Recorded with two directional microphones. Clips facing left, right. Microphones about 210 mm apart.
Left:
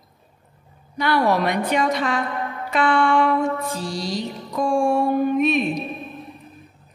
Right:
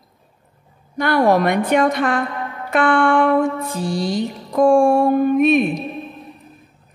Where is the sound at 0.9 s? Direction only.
50° right (ahead or behind).